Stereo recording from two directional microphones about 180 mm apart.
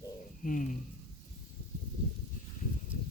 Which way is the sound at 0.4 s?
45° left (ahead or behind).